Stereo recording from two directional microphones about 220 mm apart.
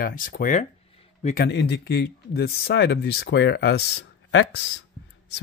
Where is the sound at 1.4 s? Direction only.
50° left (ahead or behind).